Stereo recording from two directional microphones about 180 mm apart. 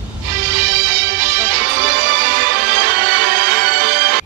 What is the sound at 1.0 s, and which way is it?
Music, 55° right (ahead or behind).